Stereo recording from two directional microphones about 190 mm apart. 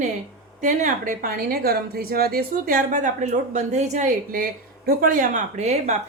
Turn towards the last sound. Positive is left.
turn(degrees=-35)  # may be behind; listen again after turning